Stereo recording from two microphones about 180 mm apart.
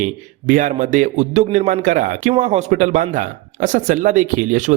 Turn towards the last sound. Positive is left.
turn(degrees=-45)  # may be behind; listen again after turning